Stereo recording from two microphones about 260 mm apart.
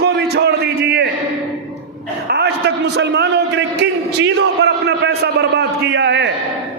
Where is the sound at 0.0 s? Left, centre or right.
Right.